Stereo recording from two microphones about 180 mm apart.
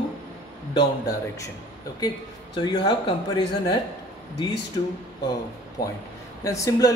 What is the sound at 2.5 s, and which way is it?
Speech, 20° left (ahead or behind).